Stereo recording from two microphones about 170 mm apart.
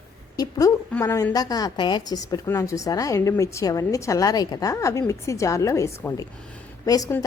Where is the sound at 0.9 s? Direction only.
15° left (ahead or behind).